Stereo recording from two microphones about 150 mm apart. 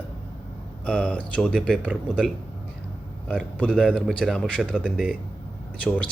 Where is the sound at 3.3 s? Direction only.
5° left (ahead or behind).